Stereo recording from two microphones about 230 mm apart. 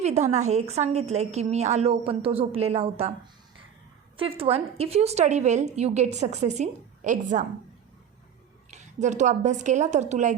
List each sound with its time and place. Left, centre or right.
0.0 s a woman's voice: right
4.2 s a woman's voice: right
8.7 s a woman's voice: right